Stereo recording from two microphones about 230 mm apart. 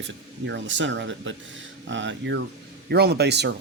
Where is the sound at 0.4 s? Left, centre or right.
Right.